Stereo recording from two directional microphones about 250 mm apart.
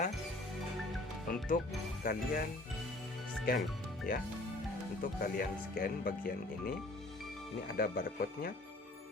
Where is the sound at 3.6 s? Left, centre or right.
Centre.